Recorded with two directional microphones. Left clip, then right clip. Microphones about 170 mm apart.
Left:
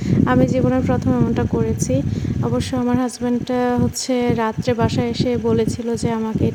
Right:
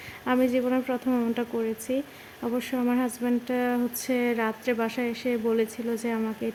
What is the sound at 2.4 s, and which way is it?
Speech, 15° left (ahead or behind).